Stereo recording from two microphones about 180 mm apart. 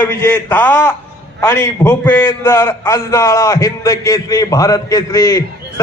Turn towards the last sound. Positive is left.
turn(degrees=20)  # may be behind; listen again after turning